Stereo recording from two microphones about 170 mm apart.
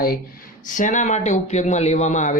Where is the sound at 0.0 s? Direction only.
60° left (ahead or behind).